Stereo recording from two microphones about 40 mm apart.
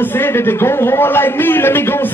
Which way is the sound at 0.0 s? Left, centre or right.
Left.